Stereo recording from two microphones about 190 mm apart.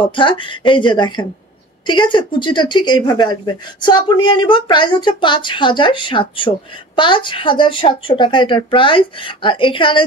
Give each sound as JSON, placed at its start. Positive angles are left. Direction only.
{"t": 0.0, "sound": "speech", "side_deg": 25}